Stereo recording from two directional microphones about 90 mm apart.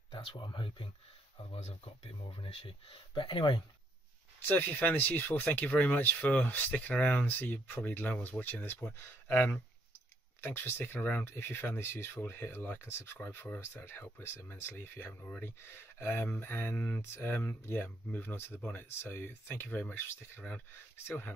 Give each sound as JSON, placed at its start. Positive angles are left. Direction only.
{"t": 0.3, "sound": "speech", "side_deg": 60}
{"t": 1.5, "sound": "speech", "side_deg": 90}
{"t": 4.5, "sound": "speech", "side_deg": 20}